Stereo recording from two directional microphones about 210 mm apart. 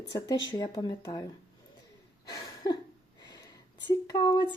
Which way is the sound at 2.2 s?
20° left (ahead or behind).